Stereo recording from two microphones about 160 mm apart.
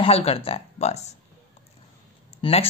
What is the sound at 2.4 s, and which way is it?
Speech, 35° left (ahead or behind).